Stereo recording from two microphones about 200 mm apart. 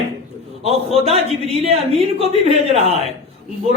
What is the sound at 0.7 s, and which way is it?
Speech, 30° right (ahead or behind).